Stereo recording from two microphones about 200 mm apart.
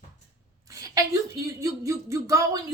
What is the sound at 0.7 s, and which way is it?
Speech, 15° right (ahead or behind).